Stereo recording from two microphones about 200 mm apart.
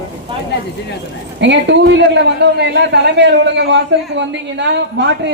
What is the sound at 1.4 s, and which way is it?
A man's voice, 60° right (ahead or behind).